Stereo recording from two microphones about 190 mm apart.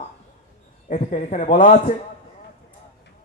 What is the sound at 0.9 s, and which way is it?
A man's voice, 45° left (ahead or behind).